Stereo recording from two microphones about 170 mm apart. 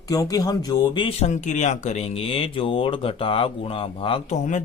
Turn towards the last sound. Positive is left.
turn(degrees=45)  # may be behind; listen again after turning